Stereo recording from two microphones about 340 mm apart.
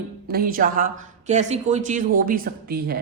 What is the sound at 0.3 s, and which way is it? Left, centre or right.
Speech, right.